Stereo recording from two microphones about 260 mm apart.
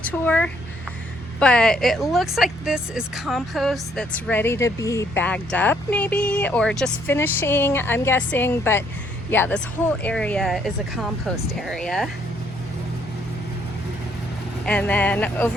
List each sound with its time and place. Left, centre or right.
0.0 s a woman's voice: centre
14.6 s a woman's voice: centre